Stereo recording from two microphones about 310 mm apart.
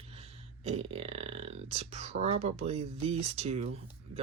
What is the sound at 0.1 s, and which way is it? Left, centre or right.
Speech, centre.